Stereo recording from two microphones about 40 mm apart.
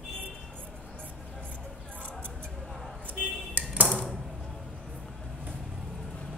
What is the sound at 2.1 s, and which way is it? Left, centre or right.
Mouse, left.